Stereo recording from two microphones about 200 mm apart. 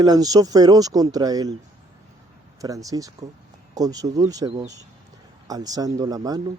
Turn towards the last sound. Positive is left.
turn(degrees=-20)  # may be behind; listen again after turning